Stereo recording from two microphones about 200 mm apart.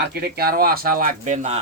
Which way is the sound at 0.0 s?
50° right (ahead or behind).